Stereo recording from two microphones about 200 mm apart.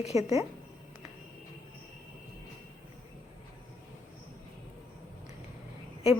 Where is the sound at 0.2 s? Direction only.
15° right (ahead or behind).